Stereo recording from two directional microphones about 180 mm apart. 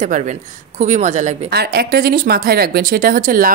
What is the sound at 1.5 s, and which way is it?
Speech, 60° right (ahead or behind).